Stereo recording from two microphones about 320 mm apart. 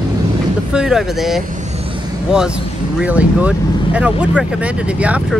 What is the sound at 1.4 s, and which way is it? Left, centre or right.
Vehicle, right.